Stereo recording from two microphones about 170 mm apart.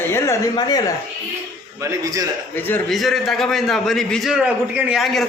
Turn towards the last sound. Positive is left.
turn(degrees=0)  # may be behind; listen again after turning